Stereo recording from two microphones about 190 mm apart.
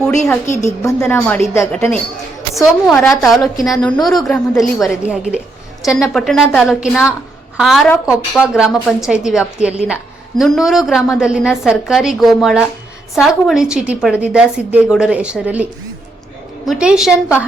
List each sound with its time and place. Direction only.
0.5 s a woman's voice: 15° left (ahead or behind); by 15.6 s 5° right (ahead or behind)
16.6 s a woman's voice: 5° right (ahead or behind)